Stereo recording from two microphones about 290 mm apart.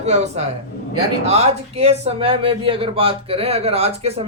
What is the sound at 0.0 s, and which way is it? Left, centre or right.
A man's voice, right.